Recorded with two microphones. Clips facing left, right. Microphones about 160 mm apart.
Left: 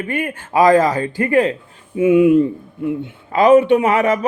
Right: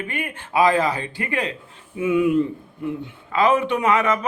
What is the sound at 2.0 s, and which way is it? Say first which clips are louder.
Speech: left 8 dB; 30° left (ahead or behind).